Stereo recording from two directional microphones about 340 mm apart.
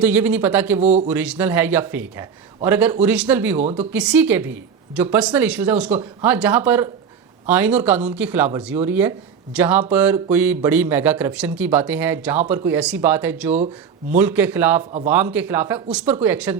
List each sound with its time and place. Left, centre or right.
0.0 s speech: centre